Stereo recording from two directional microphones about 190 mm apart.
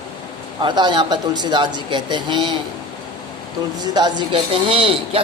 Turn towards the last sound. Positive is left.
turn(degrees=-30)  # may be behind; listen again after turning